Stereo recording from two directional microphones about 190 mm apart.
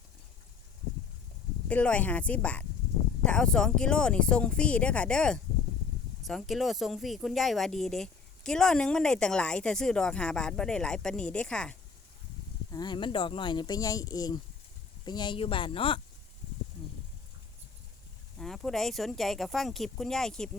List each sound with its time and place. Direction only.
1.6 s speech: 5° left (ahead or behind)
12.7 s speech: 25° left (ahead or behind)
18.3 s speech: centre (ahead or behind)